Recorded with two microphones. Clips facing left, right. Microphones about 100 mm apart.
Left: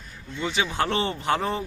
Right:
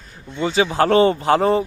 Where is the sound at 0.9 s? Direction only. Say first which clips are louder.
Right 10 dB; 45° right (ahead or behind).